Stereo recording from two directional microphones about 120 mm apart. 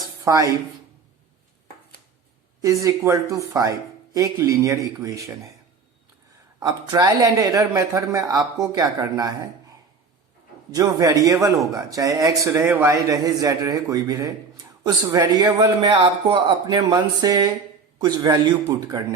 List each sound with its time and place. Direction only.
0.3 s speech: 25° right (ahead or behind)
2.6 s speech: 25° right (ahead or behind)
6.6 s speech: 35° right (ahead or behind)
10.8 s a man's voice: 30° right (ahead or behind)